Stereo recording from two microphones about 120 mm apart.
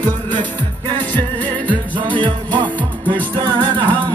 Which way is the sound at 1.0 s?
15° left (ahead or behind).